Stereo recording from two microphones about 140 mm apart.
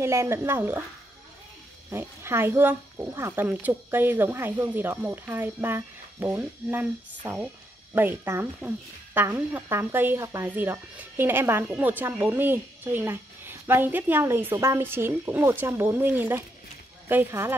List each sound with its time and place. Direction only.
0.0 s speech: 20° right (ahead or behind)
1.9 s speech: 15° right (ahead or behind)
7.9 s speech: 15° right (ahead or behind)